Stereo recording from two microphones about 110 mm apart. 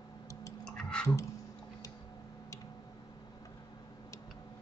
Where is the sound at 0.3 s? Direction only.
30° left (ahead or behind).